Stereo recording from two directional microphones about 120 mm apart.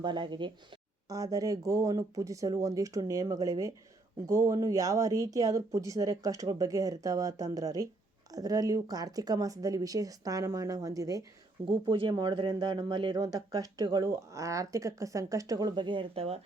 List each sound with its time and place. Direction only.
0.0 s speech: 40° right (ahead or behind)
1.0 s speech: 30° right (ahead or behind)
11.6 s speech: 45° right (ahead or behind)